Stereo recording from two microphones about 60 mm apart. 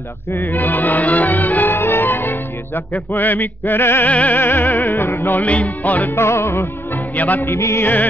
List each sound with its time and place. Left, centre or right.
0.4 s music: left
4.1 s music: left
4.4 s music: left
6.1 s music: left
7.2 s music: left
7.4 s music: left